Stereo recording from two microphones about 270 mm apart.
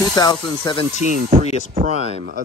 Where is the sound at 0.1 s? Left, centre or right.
Centre.